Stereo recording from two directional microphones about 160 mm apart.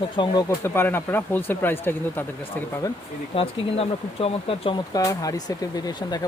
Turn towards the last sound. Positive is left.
turn(degrees=25)  # may be behind; listen again after turning